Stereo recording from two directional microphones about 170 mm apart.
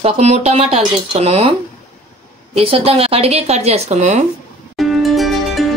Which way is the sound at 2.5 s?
35° right (ahead or behind).